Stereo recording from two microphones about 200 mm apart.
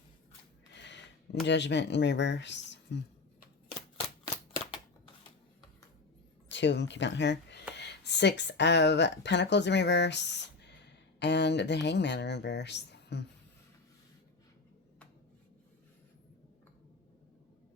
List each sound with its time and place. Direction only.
0.7 s speech: 60° left (ahead or behind)
6.5 s speech: 60° left (ahead or behind)